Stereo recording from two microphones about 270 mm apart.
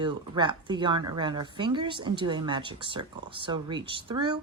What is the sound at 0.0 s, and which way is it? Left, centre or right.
Speech, centre.